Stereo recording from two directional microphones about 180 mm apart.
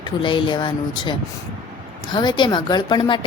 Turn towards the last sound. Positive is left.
turn(degrees=25)  # may be behind; listen again after turning